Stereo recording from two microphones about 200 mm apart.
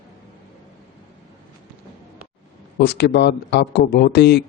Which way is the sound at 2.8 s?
55° left (ahead or behind).